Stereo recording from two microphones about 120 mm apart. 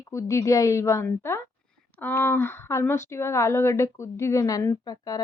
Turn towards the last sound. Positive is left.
turn(degrees=30)  # may be behind; listen again after turning